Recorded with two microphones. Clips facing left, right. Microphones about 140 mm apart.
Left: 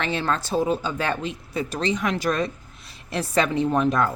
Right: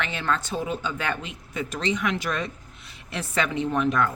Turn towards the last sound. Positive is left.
turn(degrees=35)  # may be behind; listen again after turning